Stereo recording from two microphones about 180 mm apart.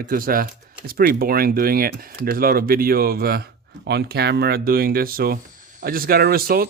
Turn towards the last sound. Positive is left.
turn(degrees=-55)  # may be behind; listen again after turning